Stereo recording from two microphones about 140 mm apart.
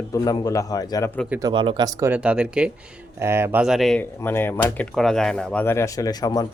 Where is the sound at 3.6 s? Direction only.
Centre (ahead or behind).